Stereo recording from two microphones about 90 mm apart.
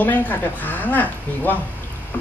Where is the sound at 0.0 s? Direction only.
20° left (ahead or behind).